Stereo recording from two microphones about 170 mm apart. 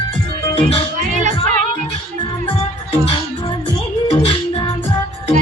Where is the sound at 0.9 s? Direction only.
45° right (ahead or behind).